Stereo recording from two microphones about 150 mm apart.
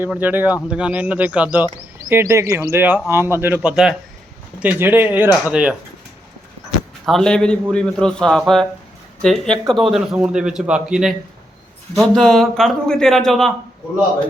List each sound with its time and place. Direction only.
0.0 s a man's voice: 10° right (ahead or behind)